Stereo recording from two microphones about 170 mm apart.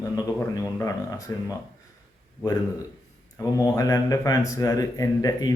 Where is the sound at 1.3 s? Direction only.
20° left (ahead or behind).